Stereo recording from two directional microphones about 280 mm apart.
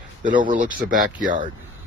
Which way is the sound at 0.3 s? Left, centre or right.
Centre.